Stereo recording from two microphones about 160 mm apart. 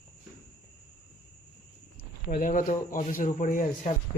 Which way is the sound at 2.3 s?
65° left (ahead or behind).